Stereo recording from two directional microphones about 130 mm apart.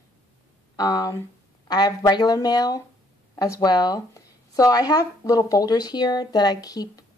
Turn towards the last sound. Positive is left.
turn(degrees=30)  # may be behind; listen again after turning